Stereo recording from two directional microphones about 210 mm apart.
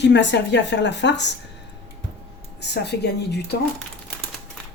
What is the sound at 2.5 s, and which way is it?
Speech, 55° left (ahead or behind).